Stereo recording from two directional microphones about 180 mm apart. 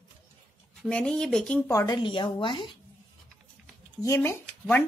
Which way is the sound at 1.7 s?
20° left (ahead or behind).